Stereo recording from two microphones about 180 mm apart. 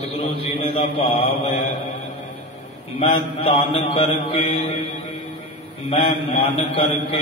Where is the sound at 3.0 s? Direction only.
30° left (ahead or behind).